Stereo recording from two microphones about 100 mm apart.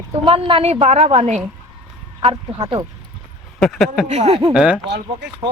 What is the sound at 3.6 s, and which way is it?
Speech, centre (ahead or behind).